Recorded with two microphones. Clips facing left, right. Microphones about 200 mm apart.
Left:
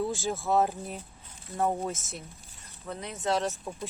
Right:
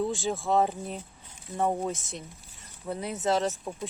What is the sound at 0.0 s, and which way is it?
Speech, centre (ahead or behind).